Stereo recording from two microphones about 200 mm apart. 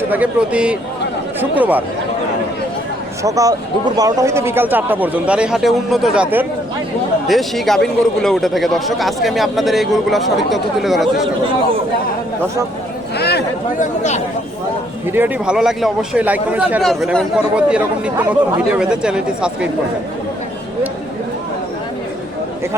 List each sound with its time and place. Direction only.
0.1 s a man's voice: 5° right (ahead or behind)
3.2 s a man's voice: 15° right (ahead or behind); by 11.3 s centre (ahead or behind)
13.1 s a sound: 55° left (ahead or behind)
13.8 s speech: 35° left (ahead or behind)
15.1 s a man's voice: 5° right (ahead or behind)